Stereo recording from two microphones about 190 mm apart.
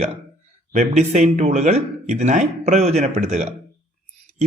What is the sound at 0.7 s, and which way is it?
Speech, 40° right (ahead or behind).